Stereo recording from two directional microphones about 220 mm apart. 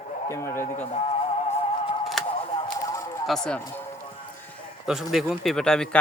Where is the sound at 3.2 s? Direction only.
Centre (ahead or behind).